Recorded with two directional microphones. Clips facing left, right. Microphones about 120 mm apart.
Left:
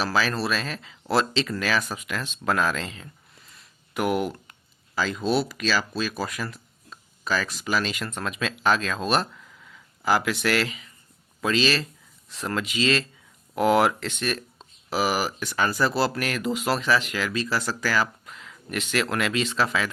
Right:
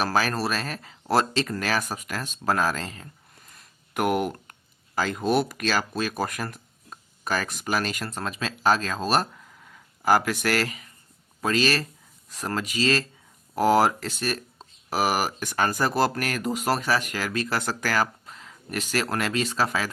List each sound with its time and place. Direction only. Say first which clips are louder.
0.0 s speech: even; 50° right (ahead or behind)
18.3 s speech: left 1 dB; 35° right (ahead or behind)